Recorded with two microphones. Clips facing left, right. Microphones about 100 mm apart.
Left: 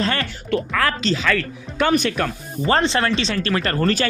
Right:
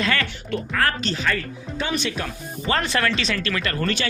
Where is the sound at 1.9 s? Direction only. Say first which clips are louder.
Left 7 dB; 50° left (ahead or behind).